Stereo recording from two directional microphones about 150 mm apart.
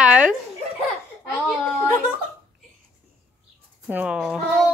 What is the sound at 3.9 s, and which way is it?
Speech, 5° right (ahead or behind).